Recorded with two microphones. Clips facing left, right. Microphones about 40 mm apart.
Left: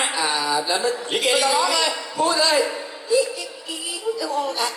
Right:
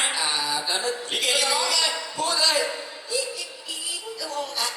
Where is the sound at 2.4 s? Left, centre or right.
Left.